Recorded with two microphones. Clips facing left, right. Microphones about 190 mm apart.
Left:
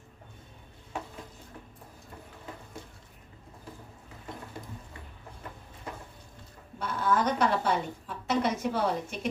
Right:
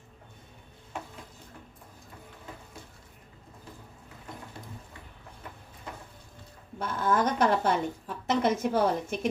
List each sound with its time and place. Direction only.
6.7 s a woman's voice: 50° right (ahead or behind)